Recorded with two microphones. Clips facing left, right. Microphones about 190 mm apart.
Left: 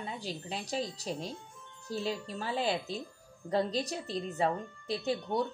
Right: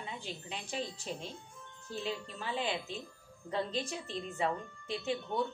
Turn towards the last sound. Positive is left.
turn(degrees=35)  # may be behind; listen again after turning